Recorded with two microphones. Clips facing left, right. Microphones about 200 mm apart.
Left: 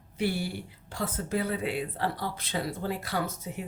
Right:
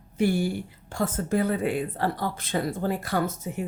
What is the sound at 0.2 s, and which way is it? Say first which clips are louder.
A woman's voice: right 6 dB; 45° right (ahead or behind).